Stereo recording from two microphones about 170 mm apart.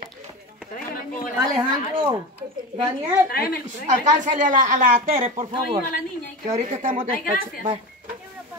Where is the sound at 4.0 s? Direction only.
45° right (ahead or behind).